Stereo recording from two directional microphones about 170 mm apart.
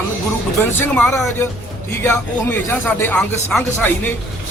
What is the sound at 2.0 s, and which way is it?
A man's voice, 10° left (ahead or behind).